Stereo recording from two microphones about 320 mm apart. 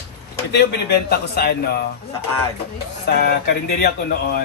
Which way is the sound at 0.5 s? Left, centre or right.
Left.